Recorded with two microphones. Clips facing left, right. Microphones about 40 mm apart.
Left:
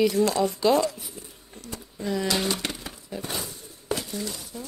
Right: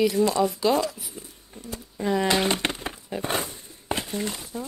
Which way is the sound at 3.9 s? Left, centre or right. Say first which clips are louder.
Right 2 dB; right.